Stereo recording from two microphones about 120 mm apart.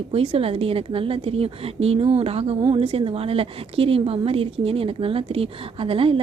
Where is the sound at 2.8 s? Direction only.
50° right (ahead or behind).